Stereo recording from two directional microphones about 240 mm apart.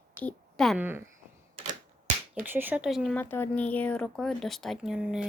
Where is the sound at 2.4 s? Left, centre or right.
Centre.